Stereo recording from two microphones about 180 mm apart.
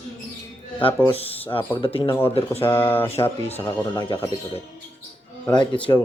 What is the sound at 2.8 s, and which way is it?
Speech, 10° left (ahead or behind).